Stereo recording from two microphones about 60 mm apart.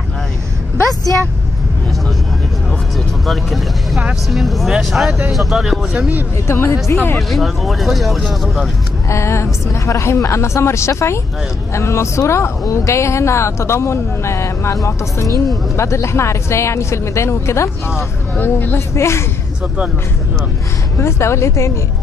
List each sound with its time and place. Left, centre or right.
3.3 s speech: centre
5.9 s speech: right
6.4 s a woman's voice: left
7.2 s speech: centre
9.1 s a woman's voice: left
18.3 s speech: left
18.8 s a woman's voice: left
21.0 s a woman's voice: left